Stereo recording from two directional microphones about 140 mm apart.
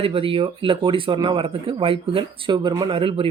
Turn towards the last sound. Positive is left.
turn(degrees=-40)  # may be behind; listen again after turning